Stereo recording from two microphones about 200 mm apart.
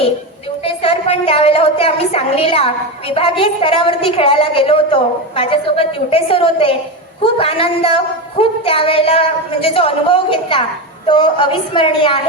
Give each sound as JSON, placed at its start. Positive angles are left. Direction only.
{"t": 0.6, "sound": "a woman's voice", "side_deg": 30}